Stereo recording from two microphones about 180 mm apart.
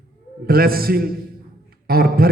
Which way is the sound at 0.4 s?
55° right (ahead or behind).